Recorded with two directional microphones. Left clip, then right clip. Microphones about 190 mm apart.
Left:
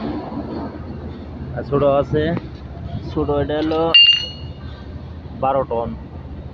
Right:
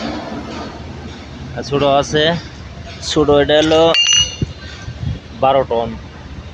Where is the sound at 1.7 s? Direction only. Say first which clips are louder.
Right 3 dB; 35° right (ahead or behind).